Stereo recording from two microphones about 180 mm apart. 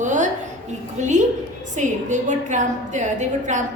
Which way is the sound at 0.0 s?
45° right (ahead or behind).